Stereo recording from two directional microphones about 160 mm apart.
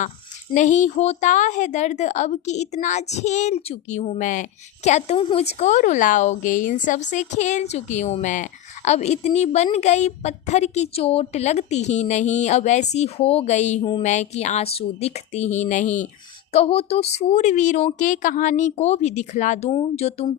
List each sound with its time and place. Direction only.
0.5 s a woman's voice: 50° left (ahead or behind)
4.2 s a woman's voice: 50° left (ahead or behind)